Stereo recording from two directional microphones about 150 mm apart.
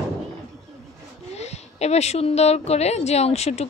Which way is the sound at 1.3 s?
45° left (ahead or behind).